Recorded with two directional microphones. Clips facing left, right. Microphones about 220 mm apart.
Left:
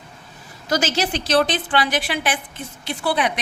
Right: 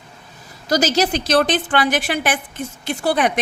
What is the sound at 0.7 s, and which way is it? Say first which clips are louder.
A woman's voice: right 4 dB; 40° right (ahead or behind).